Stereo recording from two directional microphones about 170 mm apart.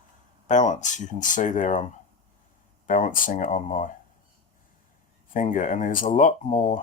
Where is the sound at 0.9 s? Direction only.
45° left (ahead or behind).